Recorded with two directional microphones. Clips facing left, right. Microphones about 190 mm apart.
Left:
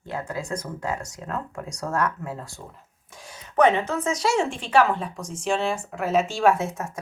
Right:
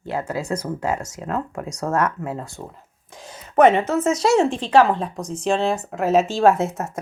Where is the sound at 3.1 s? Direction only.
20° right (ahead or behind).